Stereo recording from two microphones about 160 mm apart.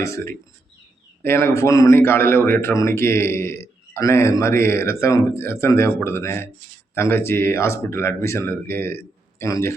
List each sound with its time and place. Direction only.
0.0 s a man's voice: 20° left (ahead or behind)